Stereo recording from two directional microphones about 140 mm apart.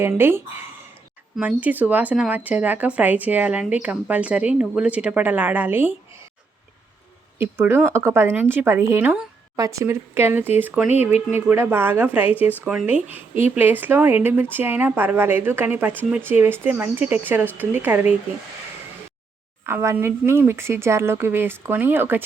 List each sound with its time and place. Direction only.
0.2 s speech: 15° right (ahead or behind)
7.3 s speech: 15° right (ahead or behind)
19.6 s speech: 15° right (ahead or behind)